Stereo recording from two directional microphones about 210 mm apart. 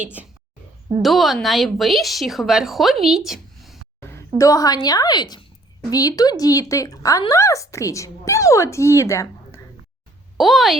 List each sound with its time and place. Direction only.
0.0 s a woman's voice: 5° right (ahead or behind)
4.4 s a woman's voice: 15° left (ahead or behind)
10.3 s speech: centre (ahead or behind)